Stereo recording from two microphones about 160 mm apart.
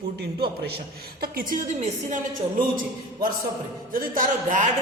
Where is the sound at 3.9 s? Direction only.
60° right (ahead or behind).